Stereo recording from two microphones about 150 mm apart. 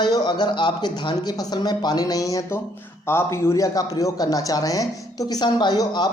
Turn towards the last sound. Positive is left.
turn(degrees=25)  # may be behind; listen again after turning